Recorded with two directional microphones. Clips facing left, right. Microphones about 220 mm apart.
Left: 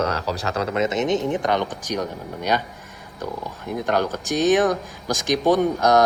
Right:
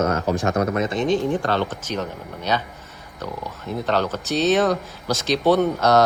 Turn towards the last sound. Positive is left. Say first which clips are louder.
# even
turn(degrees=15)  # may be behind; listen again after turning